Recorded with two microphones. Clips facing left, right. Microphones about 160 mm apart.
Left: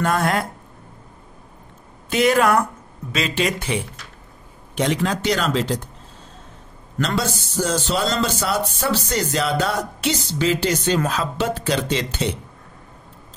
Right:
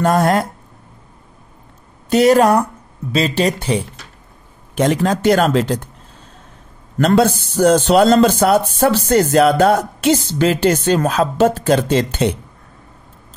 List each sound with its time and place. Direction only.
0.0 s speech: 40° right (ahead or behind)
2.0 s speech: 40° right (ahead or behind)
4.7 s a man's voice: 45° right (ahead or behind)
7.0 s a man's voice: 55° right (ahead or behind)